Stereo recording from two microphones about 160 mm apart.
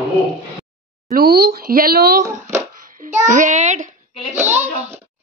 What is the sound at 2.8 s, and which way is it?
Babbling, 60° right (ahead or behind).